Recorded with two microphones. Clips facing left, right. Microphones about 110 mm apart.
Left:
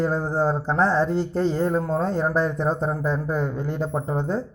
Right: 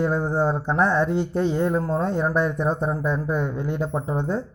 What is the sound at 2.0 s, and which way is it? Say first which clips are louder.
Speech: even; 35° left (ahead or behind).